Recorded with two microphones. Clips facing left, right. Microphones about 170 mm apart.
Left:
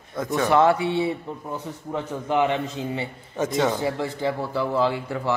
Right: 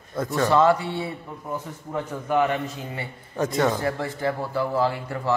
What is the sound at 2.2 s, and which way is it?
Speech, 20° left (ahead or behind).